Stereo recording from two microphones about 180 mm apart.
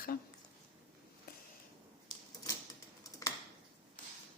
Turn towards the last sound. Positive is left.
turn(degrees=20)  # may be behind; listen again after turning